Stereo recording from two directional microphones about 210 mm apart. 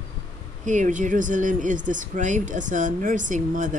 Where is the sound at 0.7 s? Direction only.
35° right (ahead or behind).